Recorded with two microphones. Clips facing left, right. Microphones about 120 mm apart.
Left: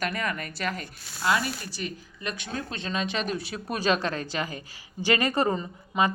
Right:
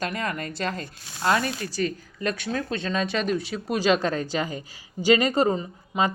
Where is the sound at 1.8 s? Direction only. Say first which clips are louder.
Right 8 dB; 40° right (ahead or behind).